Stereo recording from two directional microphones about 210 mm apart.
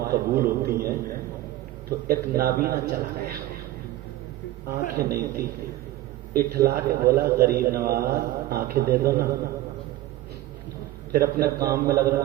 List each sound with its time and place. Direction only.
0.0 s a man's voice: 45° right (ahead or behind)
2.0 s a man's voice: 45° right (ahead or behind)
4.9 s a man's voice: 45° right (ahead or behind)
11.1 s a man's voice: 45° right (ahead or behind)
11.6 s a man's voice: 15° right (ahead or behind)